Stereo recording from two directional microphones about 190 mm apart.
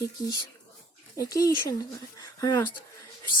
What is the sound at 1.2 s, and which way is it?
Speech, 15° left (ahead or behind).